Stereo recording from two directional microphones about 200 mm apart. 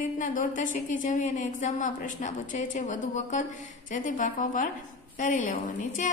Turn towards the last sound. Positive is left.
turn(degrees=40)  # may be behind; listen again after turning